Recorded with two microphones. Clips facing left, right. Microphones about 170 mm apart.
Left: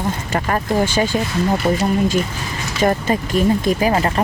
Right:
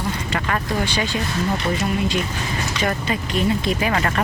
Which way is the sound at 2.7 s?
40° left (ahead or behind).